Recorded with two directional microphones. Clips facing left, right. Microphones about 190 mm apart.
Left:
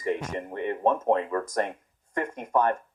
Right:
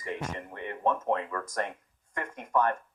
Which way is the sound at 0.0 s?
30° left (ahead or behind).